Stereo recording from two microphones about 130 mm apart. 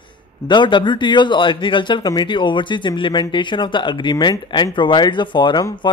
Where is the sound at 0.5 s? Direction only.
35° left (ahead or behind).